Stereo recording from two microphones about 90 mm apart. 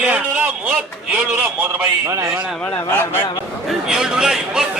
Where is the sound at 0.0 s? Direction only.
15° right (ahead or behind).